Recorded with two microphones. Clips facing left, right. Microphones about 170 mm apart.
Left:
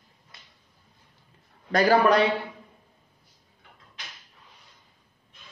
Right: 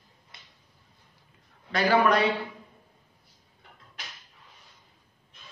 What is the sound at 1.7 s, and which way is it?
Speech, 40° left (ahead or behind).